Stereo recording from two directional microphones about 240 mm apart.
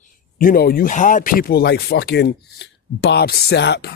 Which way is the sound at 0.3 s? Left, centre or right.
Left.